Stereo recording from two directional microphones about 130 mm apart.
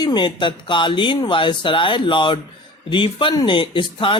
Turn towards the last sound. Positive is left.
turn(degrees=40)  # may be behind; listen again after turning